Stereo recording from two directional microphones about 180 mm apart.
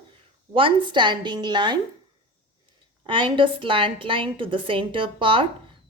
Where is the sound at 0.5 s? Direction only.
25° right (ahead or behind).